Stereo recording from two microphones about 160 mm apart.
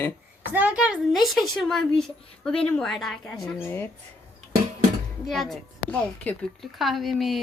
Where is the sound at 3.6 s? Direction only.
15° left (ahead or behind).